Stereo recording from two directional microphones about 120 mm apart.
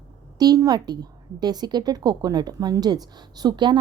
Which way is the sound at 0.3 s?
30° right (ahead or behind).